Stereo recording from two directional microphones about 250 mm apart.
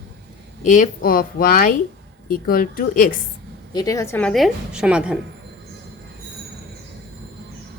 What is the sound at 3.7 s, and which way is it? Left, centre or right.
A woman's voice, centre.